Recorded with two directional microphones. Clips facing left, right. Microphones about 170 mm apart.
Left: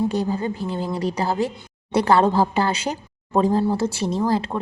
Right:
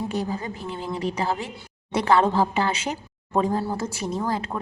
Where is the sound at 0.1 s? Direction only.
30° left (ahead or behind).